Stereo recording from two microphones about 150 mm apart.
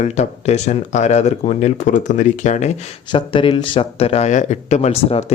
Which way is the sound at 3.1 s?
35° left (ahead or behind).